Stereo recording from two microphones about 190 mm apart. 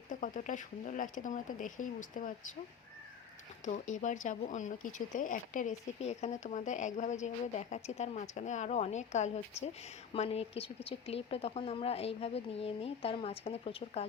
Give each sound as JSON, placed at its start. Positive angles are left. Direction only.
{"t": 0.1, "sound": "speech", "side_deg": 45}
{"t": 3.7, "sound": "speech", "side_deg": 40}